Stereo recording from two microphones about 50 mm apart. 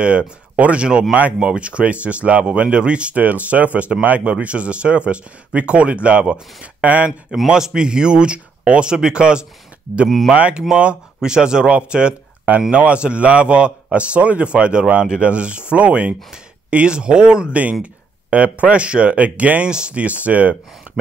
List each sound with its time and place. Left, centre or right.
0.6 s a man's voice: right
7.1 s speech: centre
10.0 s speech: centre
10.3 s a man's voice: right